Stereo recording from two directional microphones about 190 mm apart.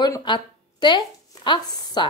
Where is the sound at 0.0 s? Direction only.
25° left (ahead or behind).